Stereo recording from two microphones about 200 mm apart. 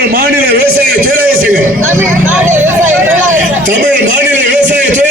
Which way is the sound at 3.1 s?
40° right (ahead or behind).